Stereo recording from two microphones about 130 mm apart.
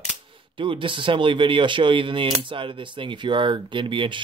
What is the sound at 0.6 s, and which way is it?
Speech, 40° right (ahead or behind).